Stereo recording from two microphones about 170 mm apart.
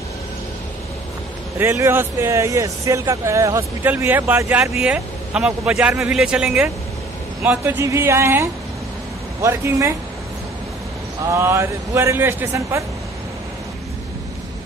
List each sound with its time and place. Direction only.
1.6 s speech: 15° right (ahead or behind)
4.8 s speech: 5° right (ahead or behind)
11.3 s speech: 15° right (ahead or behind)